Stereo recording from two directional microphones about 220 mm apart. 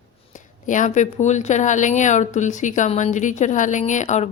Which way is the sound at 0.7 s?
35° left (ahead or behind).